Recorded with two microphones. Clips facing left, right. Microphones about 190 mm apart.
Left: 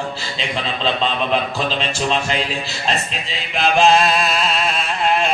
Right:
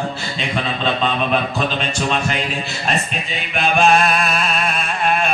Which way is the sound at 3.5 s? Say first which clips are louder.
Left 1 dB; 30° left (ahead or behind).